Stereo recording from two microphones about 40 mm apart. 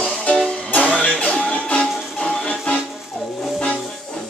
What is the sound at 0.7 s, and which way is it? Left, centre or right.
Music, left.